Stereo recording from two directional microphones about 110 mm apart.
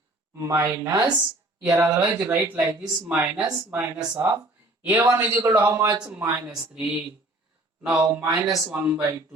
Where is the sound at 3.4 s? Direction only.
35° right (ahead or behind).